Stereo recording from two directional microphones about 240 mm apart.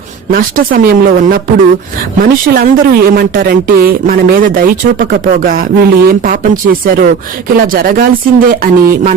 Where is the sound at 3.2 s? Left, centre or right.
Right.